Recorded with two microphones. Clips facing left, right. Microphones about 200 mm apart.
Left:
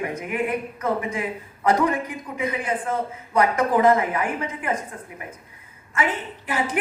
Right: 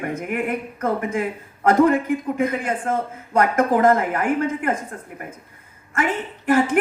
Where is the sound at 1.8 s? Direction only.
50° right (ahead or behind).